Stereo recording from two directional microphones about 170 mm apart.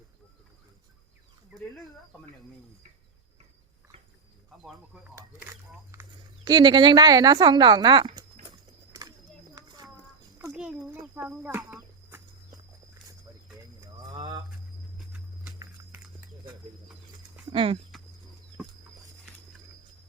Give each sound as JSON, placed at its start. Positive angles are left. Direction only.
{"t": 4.6, "sound": "speech", "side_deg": -5}
{"t": 5.9, "sound": "speech", "side_deg": -20}
{"t": 8.9, "sound": "bird", "side_deg": -20}
{"t": 9.6, "sound": "a sound", "side_deg": -25}
{"t": 10.5, "sound": "speech", "side_deg": 0}
{"t": 13.8, "sound": "boiling", "side_deg": -20}
{"t": 14.9, "sound": "a sound", "side_deg": -5}
{"t": 17.5, "sound": "speech", "side_deg": -35}